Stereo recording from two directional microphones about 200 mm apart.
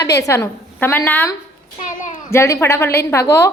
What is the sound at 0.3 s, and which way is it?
A woman's voice, 10° left (ahead or behind).